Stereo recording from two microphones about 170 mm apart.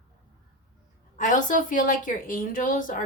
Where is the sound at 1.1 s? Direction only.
50° left (ahead or behind).